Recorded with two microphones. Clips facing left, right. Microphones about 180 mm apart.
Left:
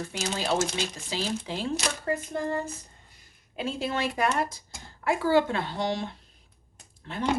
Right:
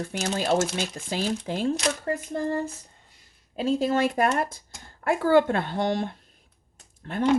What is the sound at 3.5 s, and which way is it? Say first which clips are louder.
Speech: right 7 dB; 40° right (ahead or behind).